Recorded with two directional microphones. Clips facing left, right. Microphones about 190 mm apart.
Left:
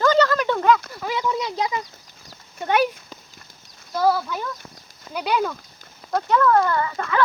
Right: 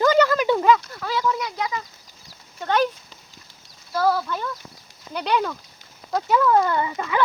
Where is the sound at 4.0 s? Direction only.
10° left (ahead or behind).